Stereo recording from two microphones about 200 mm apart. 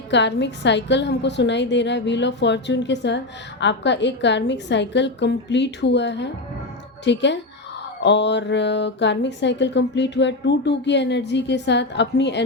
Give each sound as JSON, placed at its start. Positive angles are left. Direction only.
{"t": 0.1, "sound": "speech", "side_deg": 60}